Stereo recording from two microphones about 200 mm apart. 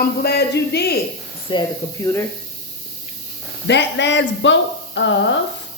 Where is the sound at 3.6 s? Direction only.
60° left (ahead or behind).